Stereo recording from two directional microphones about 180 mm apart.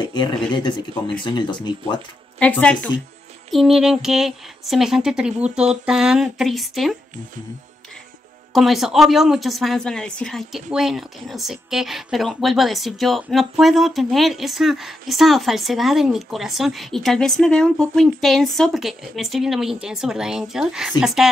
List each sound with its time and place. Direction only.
0.1 s speech: 25° left (ahead or behind)
2.3 s speech: 5° left (ahead or behind)
8.5 s speech: centre (ahead or behind)